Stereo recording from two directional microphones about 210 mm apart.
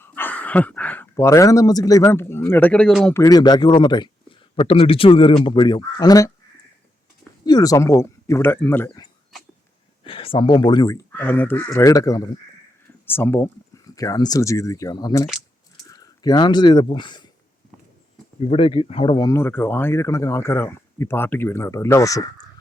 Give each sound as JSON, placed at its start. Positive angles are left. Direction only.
{"t": 0.0, "sound": "speech", "side_deg": 10}
{"t": 3.2, "sound": "speech", "side_deg": 20}
{"t": 7.4, "sound": "speech", "side_deg": 20}
{"t": 10.0, "sound": "speech", "side_deg": 25}
{"t": 18.4, "sound": "speech", "side_deg": 25}